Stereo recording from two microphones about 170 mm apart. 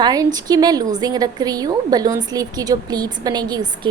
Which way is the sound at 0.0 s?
20° right (ahead or behind).